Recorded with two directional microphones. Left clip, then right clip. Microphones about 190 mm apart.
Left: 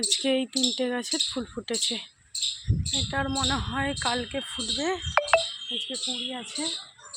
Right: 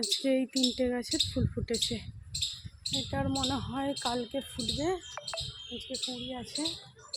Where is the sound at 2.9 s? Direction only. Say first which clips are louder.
Left 5 dB; 10° left (ahead or behind).